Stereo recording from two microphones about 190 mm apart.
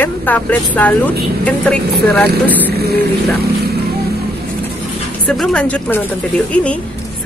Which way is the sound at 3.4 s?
55° right (ahead or behind).